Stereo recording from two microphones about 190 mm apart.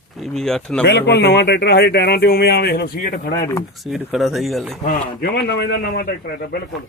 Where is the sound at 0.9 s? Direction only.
65° left (ahead or behind).